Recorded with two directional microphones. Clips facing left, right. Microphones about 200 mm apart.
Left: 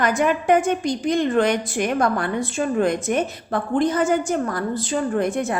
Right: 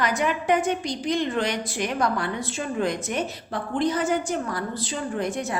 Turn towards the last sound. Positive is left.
turn(degrees=55)  # may be behind; listen again after turning